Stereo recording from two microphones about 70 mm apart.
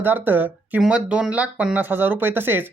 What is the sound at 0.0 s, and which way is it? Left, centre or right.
Speech, right.